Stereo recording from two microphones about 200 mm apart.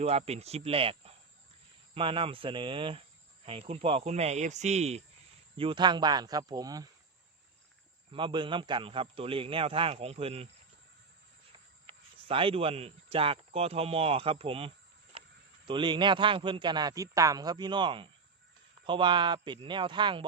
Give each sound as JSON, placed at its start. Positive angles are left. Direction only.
{"t": 0.0, "sound": "a man's voice", "side_deg": -30}
{"t": 8.1, "sound": "a man's voice", "side_deg": -25}
{"t": 11.9, "sound": "speech", "side_deg": -25}
{"t": 15.1, "sound": "a sound", "side_deg": -25}
{"t": 15.6, "sound": "a man's voice", "side_deg": -25}